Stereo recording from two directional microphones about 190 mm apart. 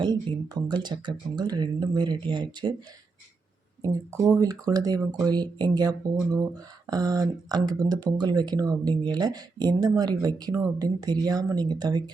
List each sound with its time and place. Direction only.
0.0 s speech: 20° right (ahead or behind)
3.8 s speech: 15° right (ahead or behind)